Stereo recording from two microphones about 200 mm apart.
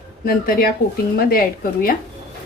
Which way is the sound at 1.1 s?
45° left (ahead or behind).